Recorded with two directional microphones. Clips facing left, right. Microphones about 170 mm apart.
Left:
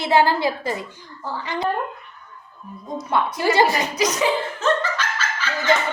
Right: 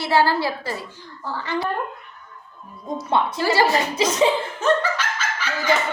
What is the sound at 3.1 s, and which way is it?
Speech, 25° right (ahead or behind).